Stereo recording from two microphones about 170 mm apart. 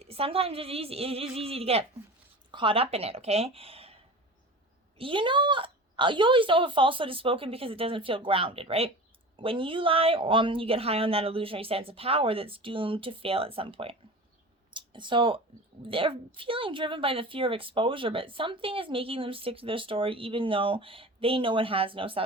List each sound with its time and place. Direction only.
0.0 s a woman's voice: 35° right (ahead or behind)
14.7 s a sound: 30° right (ahead or behind)
15.8 s a woman's voice: 30° right (ahead or behind)